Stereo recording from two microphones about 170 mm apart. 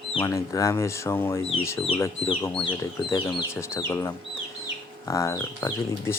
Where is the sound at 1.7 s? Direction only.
35° left (ahead or behind).